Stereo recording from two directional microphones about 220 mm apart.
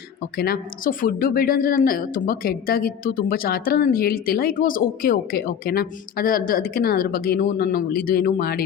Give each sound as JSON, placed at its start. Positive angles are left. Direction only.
{"t": 0.3, "sound": "a woman's voice", "side_deg": 45}